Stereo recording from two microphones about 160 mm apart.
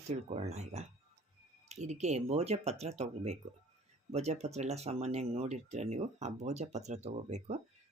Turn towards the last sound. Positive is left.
turn(degrees=-45)  # may be behind; listen again after turning